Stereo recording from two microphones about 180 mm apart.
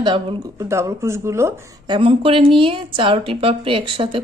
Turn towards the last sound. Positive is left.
turn(degrees=-30)  # may be behind; listen again after turning